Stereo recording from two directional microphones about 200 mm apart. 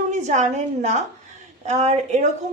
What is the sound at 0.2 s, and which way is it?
A woman's voice, 35° right (ahead or behind).